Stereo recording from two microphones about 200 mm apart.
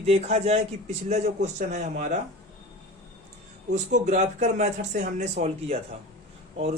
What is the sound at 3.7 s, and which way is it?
Speech, 35° right (ahead or behind).